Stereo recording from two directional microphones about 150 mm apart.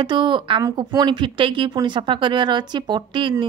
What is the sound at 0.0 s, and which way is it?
Speech, 30° right (ahead or behind).